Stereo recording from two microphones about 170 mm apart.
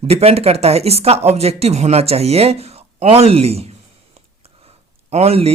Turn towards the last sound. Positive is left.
turn(degrees=-35)  # may be behind; listen again after turning